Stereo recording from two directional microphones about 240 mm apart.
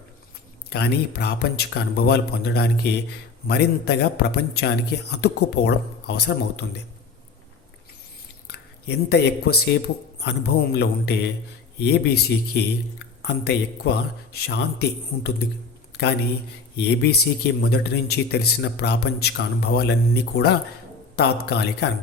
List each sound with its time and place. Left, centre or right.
0.7 s a man's voice: left
8.4 s a man's voice: left
15.9 s a sound: left
16.7 s a man's voice: left